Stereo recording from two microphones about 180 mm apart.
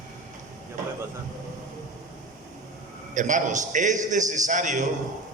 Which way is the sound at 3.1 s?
45° right (ahead or behind).